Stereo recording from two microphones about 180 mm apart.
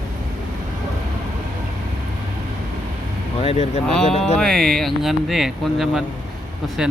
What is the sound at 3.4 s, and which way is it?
Speech, 35° left (ahead or behind).